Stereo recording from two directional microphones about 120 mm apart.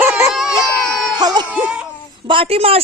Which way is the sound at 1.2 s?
35° right (ahead or behind).